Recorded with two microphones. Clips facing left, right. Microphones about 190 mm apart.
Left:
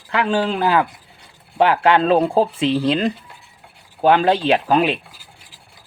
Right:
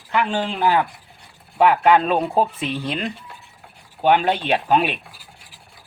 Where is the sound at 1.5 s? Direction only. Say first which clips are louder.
Even; 90° left.